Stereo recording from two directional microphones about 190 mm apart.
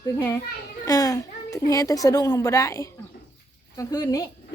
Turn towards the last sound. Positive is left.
turn(degrees=20)  # may be behind; listen again after turning